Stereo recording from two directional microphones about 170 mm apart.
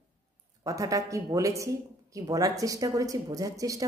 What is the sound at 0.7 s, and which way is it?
Speech, 20° right (ahead or behind).